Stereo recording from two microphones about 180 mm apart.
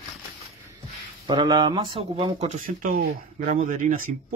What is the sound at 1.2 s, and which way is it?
Speech, 25° right (ahead or behind).